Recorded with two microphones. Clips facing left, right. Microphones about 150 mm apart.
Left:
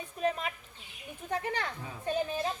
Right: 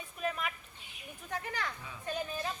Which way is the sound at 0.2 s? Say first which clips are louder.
Left 5 dB; 30° left (ahead or behind).